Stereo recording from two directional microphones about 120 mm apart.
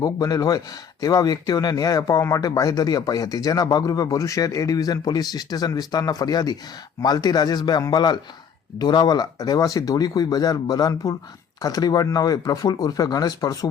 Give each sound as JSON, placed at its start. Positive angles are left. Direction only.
{"t": 0.0, "sound": "speech", "side_deg": 30}